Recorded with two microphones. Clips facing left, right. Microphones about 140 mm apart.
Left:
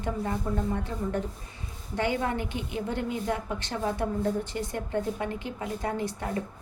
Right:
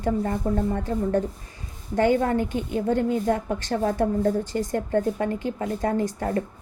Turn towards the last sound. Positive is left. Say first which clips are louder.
# right 6 dB
turn(degrees=-50)  # may be behind; listen again after turning